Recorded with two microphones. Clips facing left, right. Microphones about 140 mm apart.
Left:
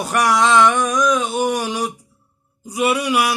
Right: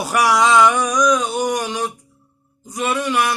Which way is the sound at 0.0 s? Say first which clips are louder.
Right 1 dB; centre (ahead or behind).